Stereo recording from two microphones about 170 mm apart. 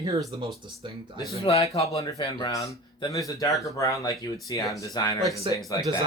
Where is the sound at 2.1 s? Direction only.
20° left (ahead or behind).